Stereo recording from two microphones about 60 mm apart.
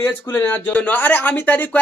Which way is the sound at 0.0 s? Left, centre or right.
Left.